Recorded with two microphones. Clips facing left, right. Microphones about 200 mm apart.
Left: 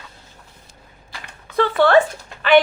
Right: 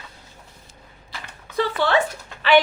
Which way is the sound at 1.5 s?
55° left (ahead or behind).